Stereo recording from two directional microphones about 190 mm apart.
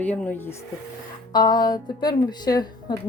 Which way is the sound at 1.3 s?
20° left (ahead or behind).